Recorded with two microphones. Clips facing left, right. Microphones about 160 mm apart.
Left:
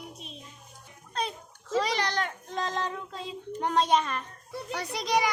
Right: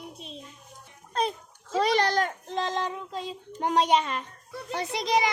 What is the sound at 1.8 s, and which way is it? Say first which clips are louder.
Speech: right 6 dB; 50° right (ahead or behind).